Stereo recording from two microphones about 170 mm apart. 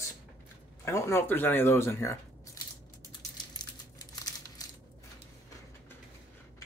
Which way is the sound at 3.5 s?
25° left (ahead or behind).